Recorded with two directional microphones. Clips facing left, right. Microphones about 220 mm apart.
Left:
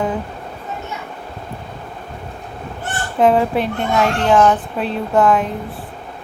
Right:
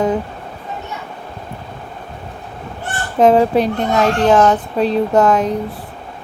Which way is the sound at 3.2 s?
40° right (ahead or behind).